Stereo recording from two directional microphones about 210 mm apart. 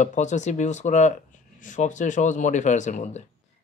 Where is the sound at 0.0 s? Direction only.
35° left (ahead or behind).